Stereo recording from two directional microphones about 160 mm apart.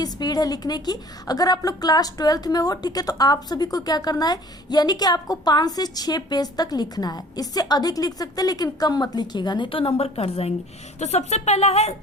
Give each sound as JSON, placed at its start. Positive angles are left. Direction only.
{"t": 0.0, "sound": "a woman's voice", "side_deg": 25}